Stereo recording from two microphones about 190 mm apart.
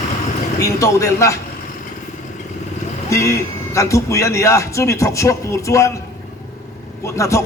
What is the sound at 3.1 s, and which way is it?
A man's voice, 15° left (ahead or behind).